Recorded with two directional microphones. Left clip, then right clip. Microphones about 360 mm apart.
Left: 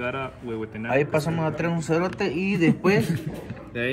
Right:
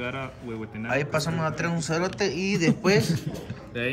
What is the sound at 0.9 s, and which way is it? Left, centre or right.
Speech, centre.